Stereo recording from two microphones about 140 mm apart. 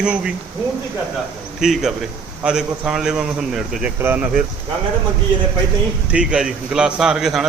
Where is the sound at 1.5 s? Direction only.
5° right (ahead or behind).